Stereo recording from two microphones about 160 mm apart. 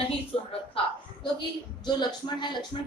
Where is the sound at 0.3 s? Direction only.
35° left (ahead or behind).